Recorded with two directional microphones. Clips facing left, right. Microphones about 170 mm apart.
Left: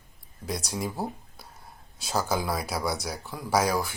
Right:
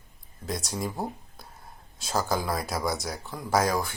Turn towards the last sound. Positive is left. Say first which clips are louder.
# even
turn(degrees=5)  # may be behind; listen again after turning